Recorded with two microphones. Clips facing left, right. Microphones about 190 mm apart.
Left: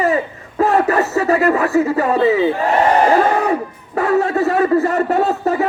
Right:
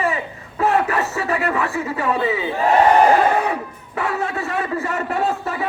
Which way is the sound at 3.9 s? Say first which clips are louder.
Left 8 dB; 40° left (ahead or behind).